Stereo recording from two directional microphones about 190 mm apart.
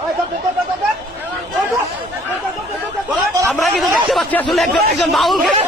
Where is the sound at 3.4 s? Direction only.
Centre (ahead or behind).